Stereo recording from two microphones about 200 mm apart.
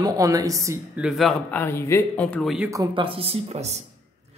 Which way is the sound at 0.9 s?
5° right (ahead or behind).